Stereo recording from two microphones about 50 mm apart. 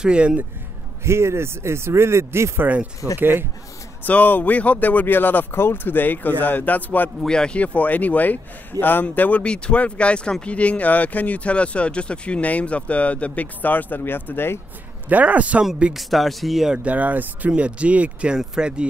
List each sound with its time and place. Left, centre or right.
0.0 s speech: centre
1.0 s a man's voice: right
3.2 s speech: right
4.0 s speech: left
7.2 s speech: centre; by 14.6 s left
15.0 s speech: right
15.9 s speech: centre
16.7 s speech: right
18.3 s speech: centre